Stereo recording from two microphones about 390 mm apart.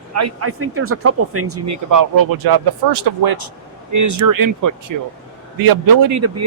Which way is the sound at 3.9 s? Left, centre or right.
Right.